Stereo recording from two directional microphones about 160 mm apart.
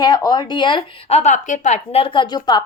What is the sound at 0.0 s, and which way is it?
Speech, 20° left (ahead or behind).